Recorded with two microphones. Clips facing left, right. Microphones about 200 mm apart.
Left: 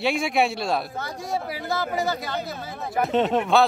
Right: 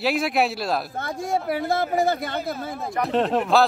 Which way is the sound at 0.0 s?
Centre (ahead or behind).